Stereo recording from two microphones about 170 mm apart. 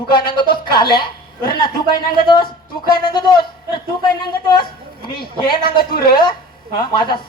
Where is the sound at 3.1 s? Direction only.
25° left (ahead or behind).